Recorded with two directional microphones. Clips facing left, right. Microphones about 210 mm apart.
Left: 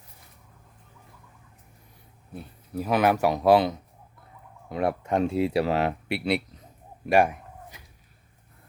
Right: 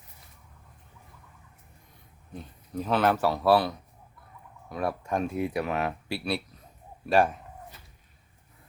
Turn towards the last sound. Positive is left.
turn(degrees=10)  # may be behind; listen again after turning